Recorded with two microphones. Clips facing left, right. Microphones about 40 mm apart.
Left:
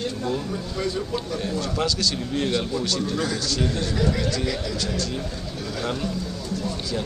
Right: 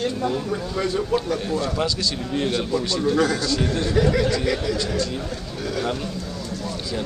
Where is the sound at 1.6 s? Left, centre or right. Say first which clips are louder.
Right 1 dB; centre.